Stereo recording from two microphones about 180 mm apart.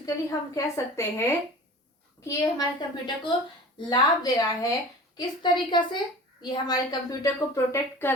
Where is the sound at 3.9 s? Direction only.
20° left (ahead or behind).